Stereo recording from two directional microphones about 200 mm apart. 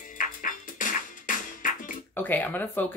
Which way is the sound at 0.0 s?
40° left (ahead or behind).